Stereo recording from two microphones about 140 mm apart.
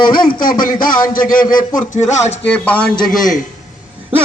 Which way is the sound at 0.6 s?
85° left.